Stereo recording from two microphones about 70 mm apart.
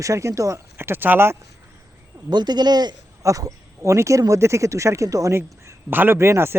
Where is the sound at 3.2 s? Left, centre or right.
Right.